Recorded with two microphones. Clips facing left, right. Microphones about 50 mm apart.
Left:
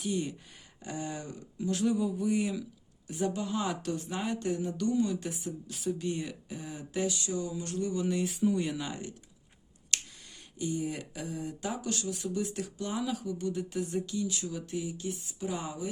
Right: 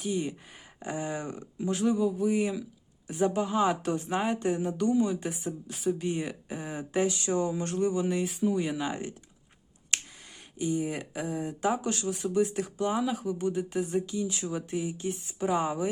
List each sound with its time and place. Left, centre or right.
0.0 s speech: centre
1.8 s speech: centre; by 4.0 s right
4.1 s a sound: right
4.4 s speech: right
7.1 s a sound: right
7.9 s speech: centre
8.9 s speech: right
9.9 s a sound: right
10.6 s speech: centre